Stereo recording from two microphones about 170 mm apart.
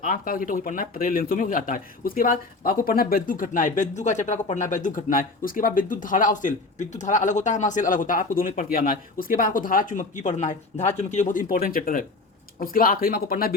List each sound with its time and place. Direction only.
0.0 s a man's voice: 55° left (ahead or behind)